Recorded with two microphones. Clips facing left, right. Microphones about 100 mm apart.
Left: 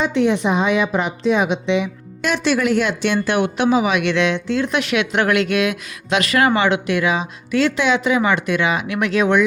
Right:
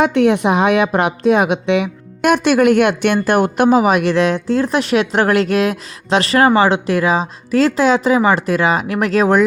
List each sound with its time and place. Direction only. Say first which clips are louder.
0.0 s a woman's voice: right 4 dB; 60° right (ahead or behind); by 9.4 s 40° right (ahead or behind)